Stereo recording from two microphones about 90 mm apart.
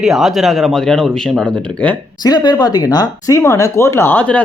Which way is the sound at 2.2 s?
50° left (ahead or behind).